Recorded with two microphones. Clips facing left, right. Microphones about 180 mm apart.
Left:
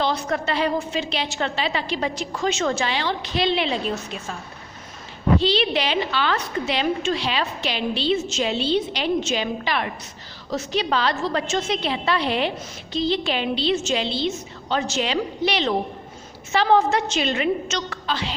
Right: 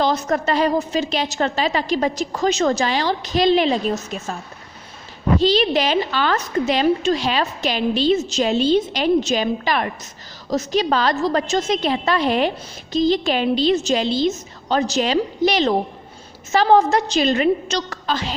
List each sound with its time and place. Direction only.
0.0 s a woman's voice: 45° right (ahead or behind)
5.4 s a woman's voice: 40° right (ahead or behind)